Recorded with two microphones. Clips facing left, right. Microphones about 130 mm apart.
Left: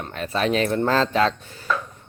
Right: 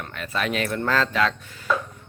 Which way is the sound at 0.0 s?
30° left (ahead or behind).